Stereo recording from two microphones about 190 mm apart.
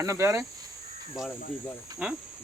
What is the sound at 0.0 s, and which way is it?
Speech, 15° right (ahead or behind).